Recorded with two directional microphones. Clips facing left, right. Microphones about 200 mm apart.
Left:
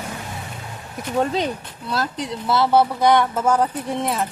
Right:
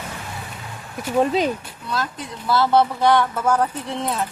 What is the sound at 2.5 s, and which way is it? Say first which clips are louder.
Speech: even; 15° left (ahead or behind).